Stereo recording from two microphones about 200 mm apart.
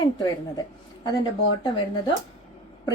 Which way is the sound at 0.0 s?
20° left (ahead or behind).